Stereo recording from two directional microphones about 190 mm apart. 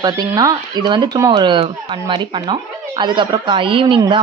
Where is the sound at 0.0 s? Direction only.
20° right (ahead or behind).